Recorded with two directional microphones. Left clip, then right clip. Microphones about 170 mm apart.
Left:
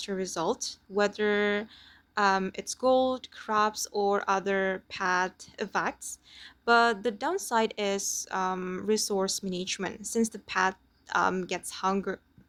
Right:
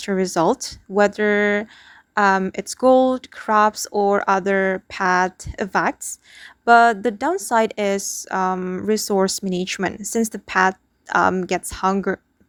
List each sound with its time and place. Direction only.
0.0 s speech: 50° right (ahead or behind)